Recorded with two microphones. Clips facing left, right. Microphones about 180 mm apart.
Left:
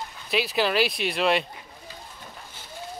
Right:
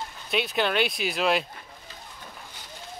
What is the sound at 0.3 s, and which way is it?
Speech, centre (ahead or behind).